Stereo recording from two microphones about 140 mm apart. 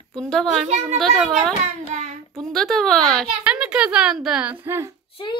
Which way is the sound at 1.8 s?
55° right (ahead or behind).